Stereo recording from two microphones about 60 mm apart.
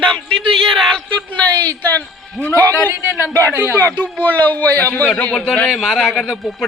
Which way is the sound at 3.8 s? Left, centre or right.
Left.